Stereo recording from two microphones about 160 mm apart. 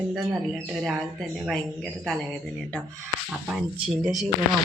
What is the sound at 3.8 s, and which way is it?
Speech, 5° right (ahead or behind).